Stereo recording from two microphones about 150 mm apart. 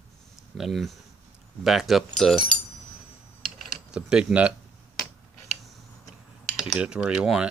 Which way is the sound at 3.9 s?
5° right (ahead or behind).